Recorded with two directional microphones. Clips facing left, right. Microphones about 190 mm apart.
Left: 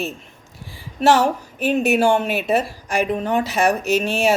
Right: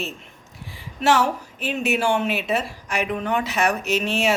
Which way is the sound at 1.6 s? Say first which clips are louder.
Left 6 dB; 40° left (ahead or behind).